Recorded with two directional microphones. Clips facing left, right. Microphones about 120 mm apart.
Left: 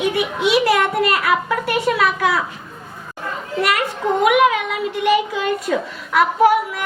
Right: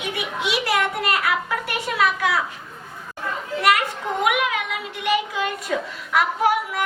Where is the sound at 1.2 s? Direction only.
35° left (ahead or behind).